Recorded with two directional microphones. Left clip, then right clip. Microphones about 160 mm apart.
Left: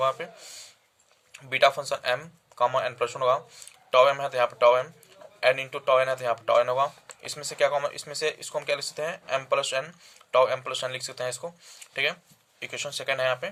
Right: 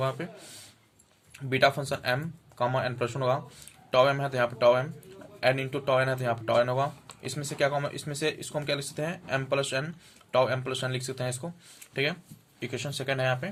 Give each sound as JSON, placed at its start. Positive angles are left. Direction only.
{"t": 0.0, "sound": "speech", "side_deg": 25}
{"t": 1.3, "sound": "speech", "side_deg": 30}